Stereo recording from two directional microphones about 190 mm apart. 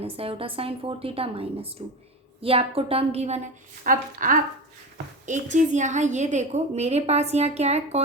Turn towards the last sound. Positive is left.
turn(degrees=-35)  # may be behind; listen again after turning